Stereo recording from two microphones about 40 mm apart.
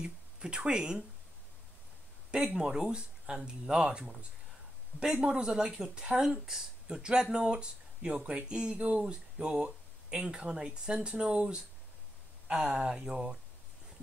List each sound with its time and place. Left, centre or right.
0.0 s speech: right
2.3 s speech: right
5.2 s speech: right
12.7 s speech: centre